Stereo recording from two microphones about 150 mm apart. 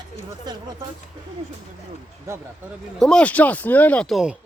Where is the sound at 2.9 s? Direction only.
5° left (ahead or behind).